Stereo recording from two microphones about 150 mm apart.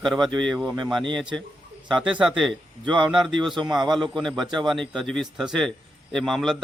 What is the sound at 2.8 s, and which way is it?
Speech, 30° right (ahead or behind).